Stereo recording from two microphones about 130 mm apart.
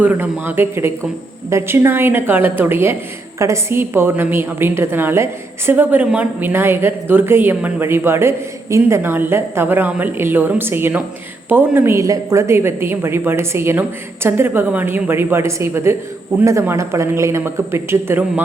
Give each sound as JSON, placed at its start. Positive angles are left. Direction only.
{"t": 0.0, "sound": "a woman's voice", "side_deg": -15}